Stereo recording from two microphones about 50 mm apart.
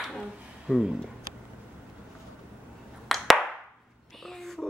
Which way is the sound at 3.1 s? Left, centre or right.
Centre.